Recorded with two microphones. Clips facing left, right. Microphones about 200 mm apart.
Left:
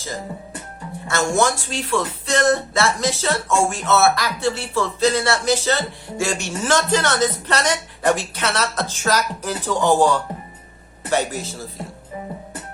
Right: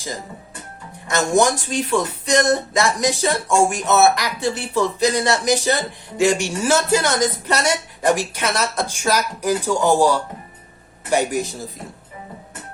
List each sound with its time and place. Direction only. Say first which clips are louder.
1.0 s speech: right 2 dB; 20° right (ahead or behind)